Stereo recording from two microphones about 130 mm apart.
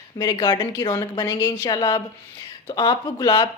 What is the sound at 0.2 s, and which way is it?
A woman's voice, 30° left (ahead or behind).